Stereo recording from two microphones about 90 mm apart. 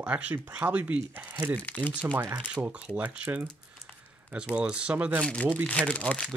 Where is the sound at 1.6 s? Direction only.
20° left (ahead or behind).